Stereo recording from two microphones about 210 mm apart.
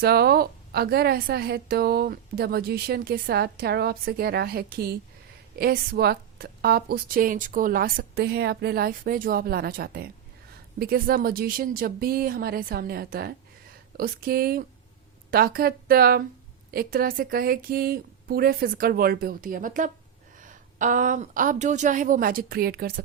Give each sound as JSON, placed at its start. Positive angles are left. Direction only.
{"t": 0.0, "sound": "a woman's voice", "side_deg": -50}